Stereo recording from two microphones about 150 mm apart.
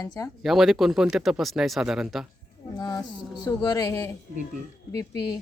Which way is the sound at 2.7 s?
25° left (ahead or behind).